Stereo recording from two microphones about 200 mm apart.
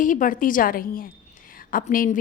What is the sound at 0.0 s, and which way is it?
A woman's voice, 40° left (ahead or behind).